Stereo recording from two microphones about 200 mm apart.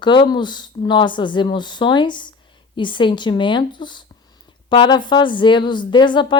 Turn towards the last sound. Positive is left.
turn(degrees=25)  # may be behind; listen again after turning